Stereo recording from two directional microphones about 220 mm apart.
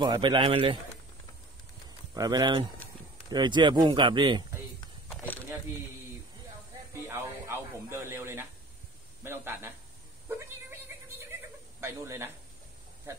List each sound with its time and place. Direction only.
0.0 s speech: 20° right (ahead or behind)
2.1 s speech: 15° right (ahead or behind)
5.1 s a sound: 5° left (ahead or behind)
6.9 s speech: 10° right (ahead or behind)
11.8 s speech: 10° right (ahead or behind)